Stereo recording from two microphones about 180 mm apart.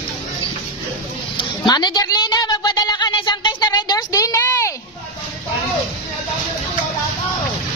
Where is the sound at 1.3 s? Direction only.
25° left (ahead or behind).